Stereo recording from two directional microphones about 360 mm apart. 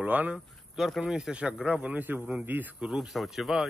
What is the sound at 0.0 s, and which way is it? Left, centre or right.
Speech, centre.